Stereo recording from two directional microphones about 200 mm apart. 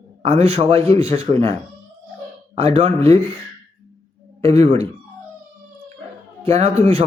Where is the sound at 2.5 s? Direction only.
30° right (ahead or behind).